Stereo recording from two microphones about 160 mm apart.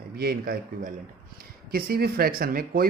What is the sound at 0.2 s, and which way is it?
Speech, 75° right (ahead or behind).